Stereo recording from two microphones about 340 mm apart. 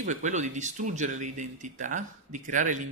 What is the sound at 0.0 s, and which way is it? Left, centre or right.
Speech, right.